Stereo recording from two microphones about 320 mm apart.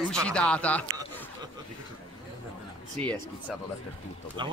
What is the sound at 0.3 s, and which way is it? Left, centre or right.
Speech, centre.